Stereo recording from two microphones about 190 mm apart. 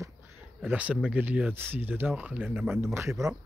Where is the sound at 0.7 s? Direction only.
5° right (ahead or behind).